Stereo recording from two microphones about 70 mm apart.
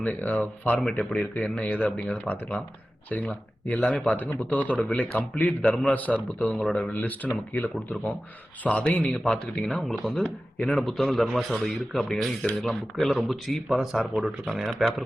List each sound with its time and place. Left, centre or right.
0.0 s a man's voice: left
5.9 s a man's voice: left
6.9 s a man's voice: left; by 15.0 s centre